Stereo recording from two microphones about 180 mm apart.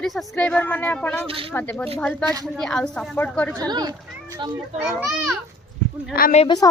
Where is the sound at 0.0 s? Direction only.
Centre (ahead or behind).